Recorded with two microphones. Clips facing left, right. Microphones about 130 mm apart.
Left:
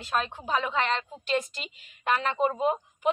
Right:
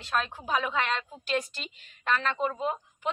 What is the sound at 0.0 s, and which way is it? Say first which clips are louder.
A woman's voice: left 1 dB; centre (ahead or behind).